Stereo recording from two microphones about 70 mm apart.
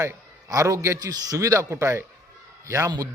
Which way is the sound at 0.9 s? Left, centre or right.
Right.